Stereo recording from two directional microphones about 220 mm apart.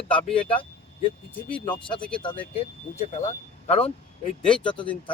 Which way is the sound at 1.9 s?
5° left (ahead or behind).